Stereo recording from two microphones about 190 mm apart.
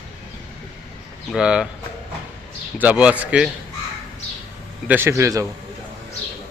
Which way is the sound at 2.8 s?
10° right (ahead or behind).